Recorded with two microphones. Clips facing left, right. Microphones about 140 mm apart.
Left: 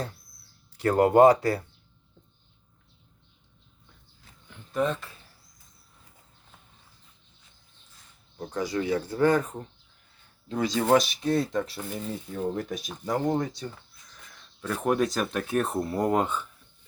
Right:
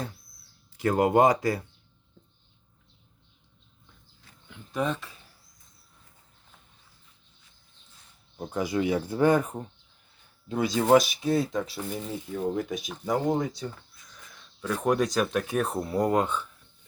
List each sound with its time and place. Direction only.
0.9 s speech: 15° right (ahead or behind)
4.4 s speech: centre (ahead or behind)
8.4 s speech: 10° right (ahead or behind)